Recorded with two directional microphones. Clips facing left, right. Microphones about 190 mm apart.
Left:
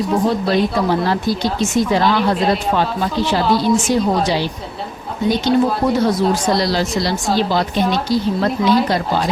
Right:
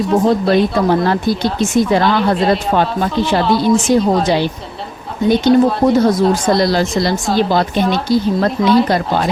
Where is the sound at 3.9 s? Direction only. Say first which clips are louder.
Right 6 dB; 50° right (ahead or behind).